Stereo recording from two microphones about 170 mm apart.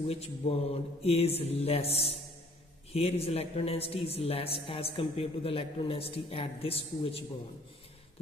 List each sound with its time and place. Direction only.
0.0 s a man's voice: 35° left (ahead or behind)